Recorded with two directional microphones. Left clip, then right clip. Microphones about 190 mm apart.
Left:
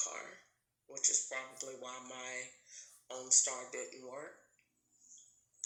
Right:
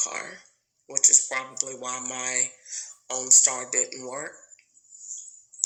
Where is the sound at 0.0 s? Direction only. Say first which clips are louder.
Right 11 dB; 50° right (ahead or behind).